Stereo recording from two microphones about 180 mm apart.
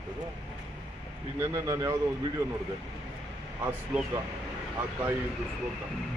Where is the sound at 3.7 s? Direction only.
10° right (ahead or behind).